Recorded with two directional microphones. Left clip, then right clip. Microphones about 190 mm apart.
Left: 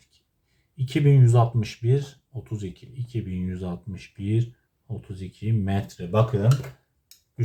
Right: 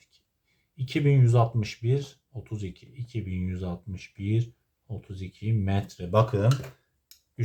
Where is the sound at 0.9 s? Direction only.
25° right (ahead or behind).